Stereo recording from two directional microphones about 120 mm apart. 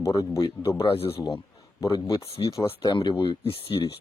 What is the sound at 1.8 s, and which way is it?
Speech, 30° left (ahead or behind).